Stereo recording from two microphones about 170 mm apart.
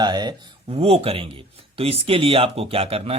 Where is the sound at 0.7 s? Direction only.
35° right (ahead or behind).